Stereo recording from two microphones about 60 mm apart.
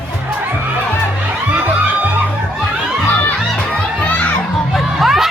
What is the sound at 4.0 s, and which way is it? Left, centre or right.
Children playing, left.